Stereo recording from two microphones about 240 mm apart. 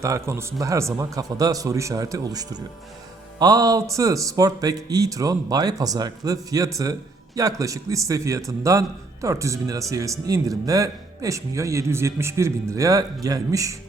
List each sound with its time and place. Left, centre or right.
0.0 s speech: centre